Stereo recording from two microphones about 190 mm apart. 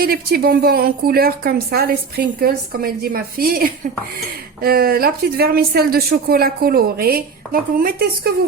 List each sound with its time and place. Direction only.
0.0 s speech: 50° right (ahead or behind)